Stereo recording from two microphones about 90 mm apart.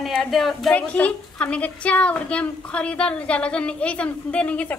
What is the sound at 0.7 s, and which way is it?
A woman's voice, 15° left (ahead or behind).